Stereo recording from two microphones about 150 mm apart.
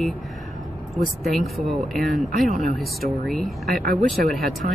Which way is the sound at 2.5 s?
50° right (ahead or behind).